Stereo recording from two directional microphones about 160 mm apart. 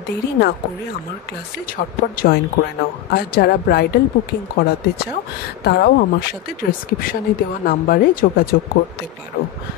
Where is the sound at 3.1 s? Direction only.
75° left (ahead or behind).